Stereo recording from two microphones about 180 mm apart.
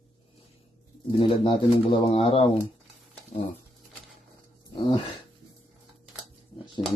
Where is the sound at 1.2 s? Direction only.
30° left (ahead or behind).